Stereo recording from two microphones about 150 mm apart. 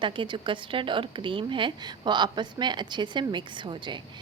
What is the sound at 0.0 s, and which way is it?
A woman's voice, 35° right (ahead or behind).